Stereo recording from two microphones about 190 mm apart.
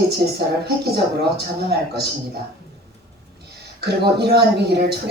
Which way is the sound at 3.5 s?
60° right (ahead or behind).